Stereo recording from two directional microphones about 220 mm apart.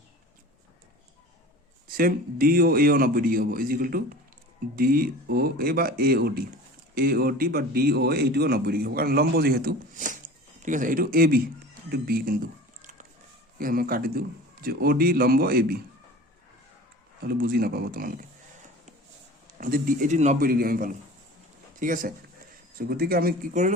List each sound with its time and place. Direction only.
2.0 s a man's voice: 40° right (ahead or behind)
11.9 s a sound: 45° right (ahead or behind)
13.6 s a man's voice: 40° right (ahead or behind)
17.2 s a man's voice: 45° right (ahead or behind)
19.5 s a man's voice: 40° right (ahead or behind)